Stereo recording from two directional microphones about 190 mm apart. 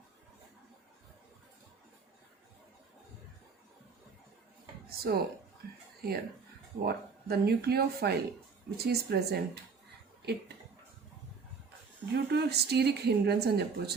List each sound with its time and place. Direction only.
4.9 s speech: 55° right (ahead or behind)
12.1 s speech: 60° right (ahead or behind)